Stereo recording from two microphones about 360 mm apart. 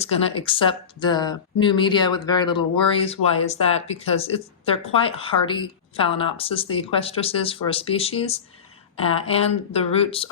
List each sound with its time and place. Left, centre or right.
0.0 s speech: centre